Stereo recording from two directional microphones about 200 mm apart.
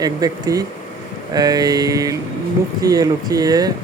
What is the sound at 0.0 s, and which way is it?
Speech, 20° right (ahead or behind).